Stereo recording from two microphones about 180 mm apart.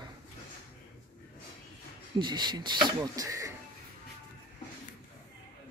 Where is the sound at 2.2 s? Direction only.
25° right (ahead or behind).